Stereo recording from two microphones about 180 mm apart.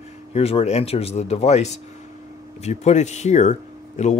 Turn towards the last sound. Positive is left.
turn(degrees=40)  # may be behind; listen again after turning